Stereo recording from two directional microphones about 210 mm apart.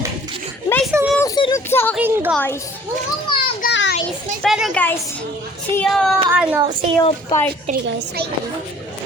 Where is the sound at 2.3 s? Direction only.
10° left (ahead or behind).